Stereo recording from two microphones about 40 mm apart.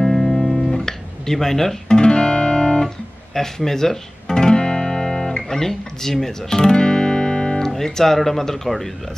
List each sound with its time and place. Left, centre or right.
0.0 s guitar: centre
2.0 s music: left
3.3 s speech: centre